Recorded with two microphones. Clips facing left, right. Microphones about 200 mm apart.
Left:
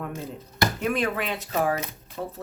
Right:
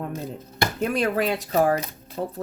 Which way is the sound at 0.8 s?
40° right (ahead or behind).